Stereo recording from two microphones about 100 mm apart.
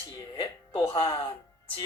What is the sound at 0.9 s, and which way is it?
Speech, 45° left (ahead or behind).